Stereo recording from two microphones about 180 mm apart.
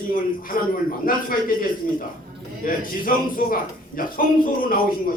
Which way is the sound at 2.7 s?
50° left (ahead or behind).